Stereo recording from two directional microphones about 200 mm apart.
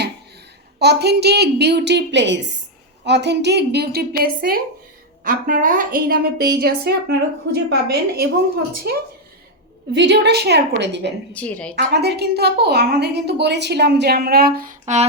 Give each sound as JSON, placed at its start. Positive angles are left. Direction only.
{"t": 0.8, "sound": "a woman's voice", "side_deg": -55}
{"t": 11.3, "sound": "a woman's voice", "side_deg": 5}
{"t": 11.9, "sound": "a woman's voice", "side_deg": -55}